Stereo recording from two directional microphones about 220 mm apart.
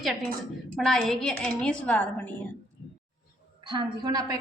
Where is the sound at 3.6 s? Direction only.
20° right (ahead or behind).